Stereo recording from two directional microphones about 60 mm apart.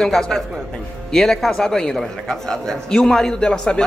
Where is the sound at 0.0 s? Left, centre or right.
Centre.